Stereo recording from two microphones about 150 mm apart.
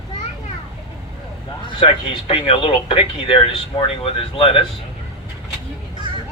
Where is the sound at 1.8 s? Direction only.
35° left (ahead or behind).